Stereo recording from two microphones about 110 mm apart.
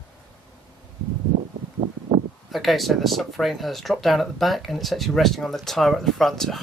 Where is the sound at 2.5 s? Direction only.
Centre (ahead or behind).